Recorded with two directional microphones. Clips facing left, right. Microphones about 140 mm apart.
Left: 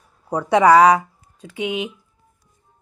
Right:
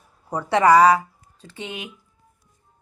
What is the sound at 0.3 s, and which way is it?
Speech, 10° left (ahead or behind).